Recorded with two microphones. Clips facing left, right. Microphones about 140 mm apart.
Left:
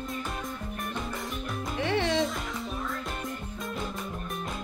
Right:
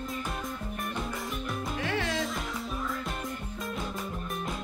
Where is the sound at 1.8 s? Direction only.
25° left (ahead or behind).